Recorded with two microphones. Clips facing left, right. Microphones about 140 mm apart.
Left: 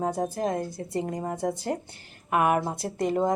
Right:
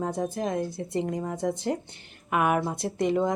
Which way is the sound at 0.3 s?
5° left (ahead or behind).